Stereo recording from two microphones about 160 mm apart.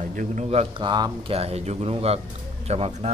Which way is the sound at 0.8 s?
30° right (ahead or behind).